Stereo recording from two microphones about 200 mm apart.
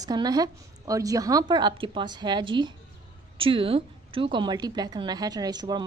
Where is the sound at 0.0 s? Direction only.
20° right (ahead or behind).